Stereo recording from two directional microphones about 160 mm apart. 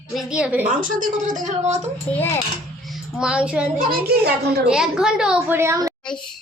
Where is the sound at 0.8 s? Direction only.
55° right (ahead or behind).